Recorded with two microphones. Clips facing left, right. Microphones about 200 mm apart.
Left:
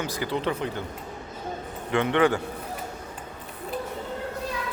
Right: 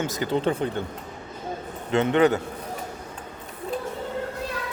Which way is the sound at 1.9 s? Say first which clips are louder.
Right 2 dB; 25° right (ahead or behind).